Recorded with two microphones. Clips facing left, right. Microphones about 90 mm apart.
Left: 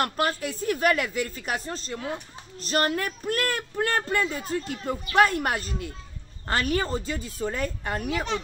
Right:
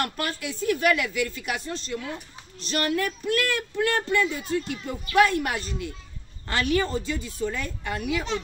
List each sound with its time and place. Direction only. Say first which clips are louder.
0.0 s speech: left 3 dB; 40° left (ahead or behind)